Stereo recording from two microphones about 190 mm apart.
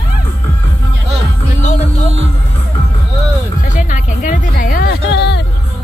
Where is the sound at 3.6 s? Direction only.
40° left (ahead or behind).